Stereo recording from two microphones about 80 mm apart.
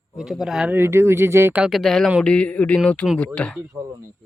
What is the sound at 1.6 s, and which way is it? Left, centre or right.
Speech, centre.